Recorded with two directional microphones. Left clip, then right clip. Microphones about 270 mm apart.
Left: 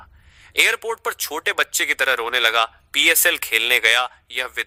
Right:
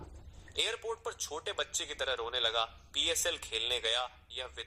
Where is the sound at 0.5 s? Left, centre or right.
Left.